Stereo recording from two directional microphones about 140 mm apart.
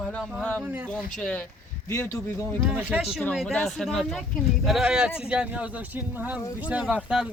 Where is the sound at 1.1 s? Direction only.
5° left (ahead or behind).